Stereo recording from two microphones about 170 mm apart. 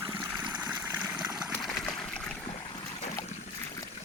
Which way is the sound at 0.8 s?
5° right (ahead or behind).